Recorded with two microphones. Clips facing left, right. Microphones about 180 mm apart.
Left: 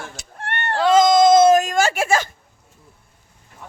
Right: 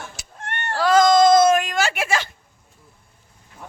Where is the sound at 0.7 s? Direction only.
20° left (ahead or behind).